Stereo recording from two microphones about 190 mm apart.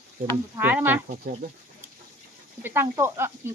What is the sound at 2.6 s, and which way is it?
Speech, 15° right (ahead or behind).